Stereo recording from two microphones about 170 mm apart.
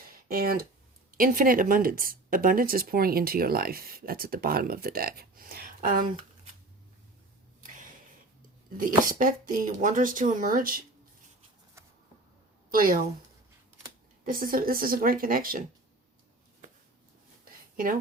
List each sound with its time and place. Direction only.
0.0 s a sound: 60° right (ahead or behind)
1.1 s speech: 55° right (ahead or behind)
9.0 s a woman's voice: 55° right (ahead or behind)
12.7 s speech: 60° right (ahead or behind)
14.3 s speech: 55° right (ahead or behind)
17.4 s a sound: 55° right (ahead or behind)